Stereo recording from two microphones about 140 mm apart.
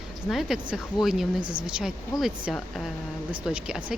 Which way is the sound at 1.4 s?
35° right (ahead or behind).